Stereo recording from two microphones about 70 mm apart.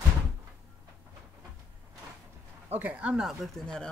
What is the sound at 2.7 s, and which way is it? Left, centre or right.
Speech, right.